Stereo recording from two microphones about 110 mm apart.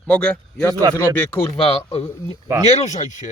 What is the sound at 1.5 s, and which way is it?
Speech, 65° left (ahead or behind).